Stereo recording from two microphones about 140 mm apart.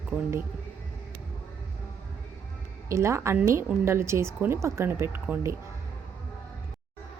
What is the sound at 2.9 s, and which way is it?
Speech, 20° right (ahead or behind).